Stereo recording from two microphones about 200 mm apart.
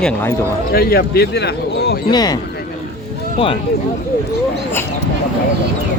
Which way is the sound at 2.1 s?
20° left (ahead or behind).